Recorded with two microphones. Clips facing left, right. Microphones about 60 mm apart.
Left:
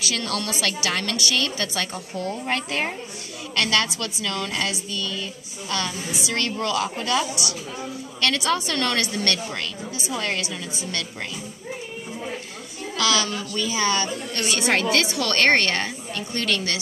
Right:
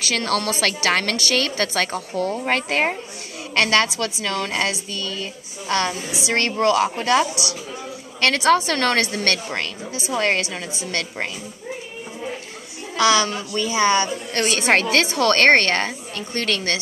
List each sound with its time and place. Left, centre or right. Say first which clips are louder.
0.0 s a woman's voice: right 5 dB; right
8.3 s a woman's voice: right 7 dB; right
12.9 s a woman's voice: right 5 dB; right
14.4 s a woman's voice: right 4 dB; right